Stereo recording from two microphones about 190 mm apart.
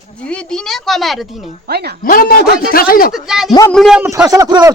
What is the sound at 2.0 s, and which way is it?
A man's voice, 50° left (ahead or behind).